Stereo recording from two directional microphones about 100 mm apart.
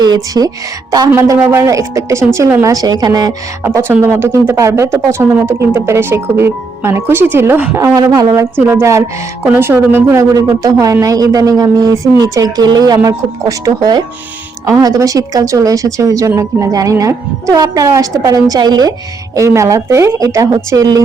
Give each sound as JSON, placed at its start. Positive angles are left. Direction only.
{"t": 0.0, "sound": "speech", "side_deg": -40}
{"t": 1.1, "sound": "speech", "side_deg": -30}
{"t": 3.6, "sound": "speech", "side_deg": -25}
{"t": 8.2, "sound": "speech", "side_deg": -40}
{"t": 8.6, "sound": "speech", "side_deg": -25}
{"t": 19.4, "sound": "speech", "side_deg": -30}